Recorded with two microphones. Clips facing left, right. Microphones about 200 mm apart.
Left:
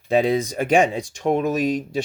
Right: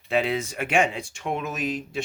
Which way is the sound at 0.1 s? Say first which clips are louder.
Left 6 dB; 35° left (ahead or behind).